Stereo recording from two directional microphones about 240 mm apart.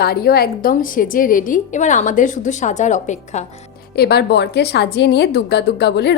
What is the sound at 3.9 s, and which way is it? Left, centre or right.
A woman's voice, left.